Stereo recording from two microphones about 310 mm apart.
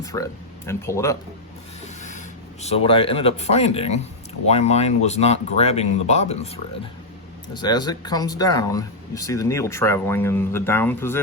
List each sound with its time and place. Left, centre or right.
0.0 s speech: centre
1.8 s speech: left; by 11.2 s centre